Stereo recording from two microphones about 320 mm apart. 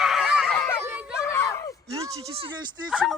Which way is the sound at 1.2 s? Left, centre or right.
Centre.